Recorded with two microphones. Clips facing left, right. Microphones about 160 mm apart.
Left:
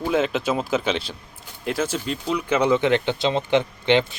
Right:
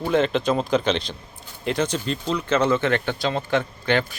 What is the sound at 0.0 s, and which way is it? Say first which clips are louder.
Speech: right 1 dB; 5° left (ahead or behind).